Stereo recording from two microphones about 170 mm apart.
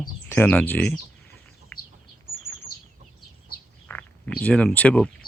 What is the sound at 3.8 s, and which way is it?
Bird, 10° left (ahead or behind).